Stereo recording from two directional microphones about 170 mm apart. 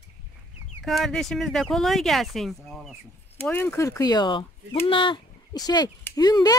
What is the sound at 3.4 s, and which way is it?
A woman's voice, 10° left (ahead or behind).